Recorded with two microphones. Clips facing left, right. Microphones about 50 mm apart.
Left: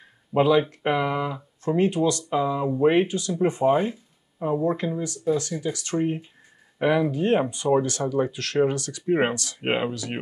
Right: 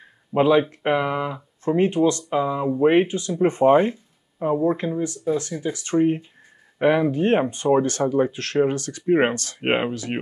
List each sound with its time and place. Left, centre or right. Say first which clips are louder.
0.3 s speech: right 2 dB; centre
3.4 s speech: right 5 dB; right
4.7 s speech: right 3 dB; right
9.0 s speech: right 4 dB; right
9.3 s speech: right 3 dB; right